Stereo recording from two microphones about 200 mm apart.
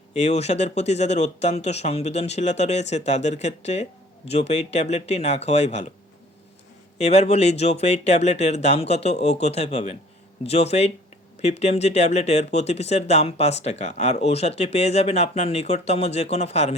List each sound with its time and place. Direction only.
0.2 s speech: 35° left (ahead or behind)
7.0 s speech: 30° left (ahead or behind)